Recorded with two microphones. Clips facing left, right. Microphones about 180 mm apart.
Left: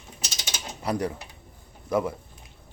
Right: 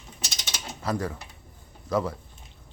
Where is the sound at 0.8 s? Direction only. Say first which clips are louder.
Left 2 dB; 15° left (ahead or behind).